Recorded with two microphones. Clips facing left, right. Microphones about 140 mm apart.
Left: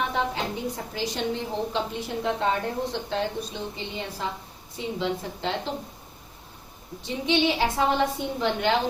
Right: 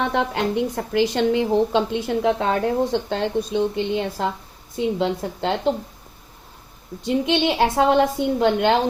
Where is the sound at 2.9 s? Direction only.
60° right (ahead or behind).